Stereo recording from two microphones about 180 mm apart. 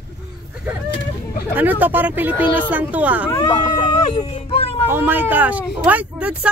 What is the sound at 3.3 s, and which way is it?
Speech, 20° left (ahead or behind).